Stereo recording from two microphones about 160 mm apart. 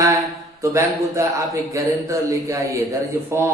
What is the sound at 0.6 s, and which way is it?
A man's voice, 20° right (ahead or behind).